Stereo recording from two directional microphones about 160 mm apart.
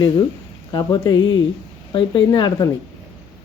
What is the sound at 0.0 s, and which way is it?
Speech, 30° left (ahead or behind).